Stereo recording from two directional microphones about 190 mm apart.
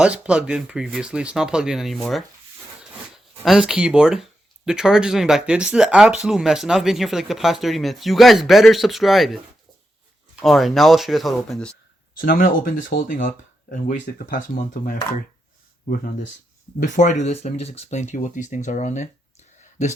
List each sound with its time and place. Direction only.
0.0 s speech: 5° right (ahead or behind)
3.4 s speech: 5° right (ahead or behind)
10.4 s speech: centre (ahead or behind)
12.1 s speech: 45° left (ahead or behind)